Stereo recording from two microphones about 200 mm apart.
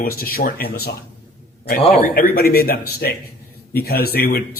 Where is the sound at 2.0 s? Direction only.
45° left (ahead or behind).